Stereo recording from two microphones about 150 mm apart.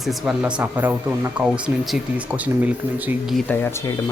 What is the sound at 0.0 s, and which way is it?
Speech, centre (ahead or behind).